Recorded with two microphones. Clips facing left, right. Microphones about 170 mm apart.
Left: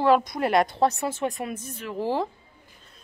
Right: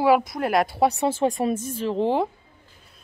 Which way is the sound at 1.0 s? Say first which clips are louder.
Right 6 dB; 30° right (ahead or behind).